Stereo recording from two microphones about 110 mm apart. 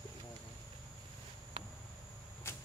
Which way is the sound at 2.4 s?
25° left (ahead or behind).